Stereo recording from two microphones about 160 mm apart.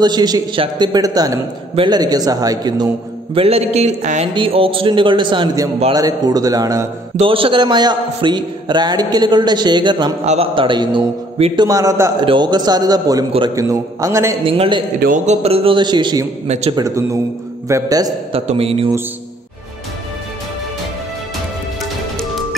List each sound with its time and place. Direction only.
0.0 s a man's voice: 25° right (ahead or behind)
3.3 s a man's voice: 40° right (ahead or behind)
4.3 s a man's voice: 35° right (ahead or behind)
7.2 s a man's voice: 35° right (ahead or behind)
10.2 s a man's voice: 40° right (ahead or behind)
11.6 s a man's voice: 20° right (ahead or behind)
14.4 s a man's voice: 35° right (ahead or behind)
15.0 s a man's voice: 55° right (ahead or behind); by 16.3 s 30° right (ahead or behind)
16.4 s a man's voice: 45° right (ahead or behind)
16.7 s a man's voice: 20° right (ahead or behind)
18.3 s a man's voice: 35° right (ahead or behind)